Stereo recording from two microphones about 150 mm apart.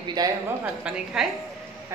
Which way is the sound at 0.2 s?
25° right (ahead or behind).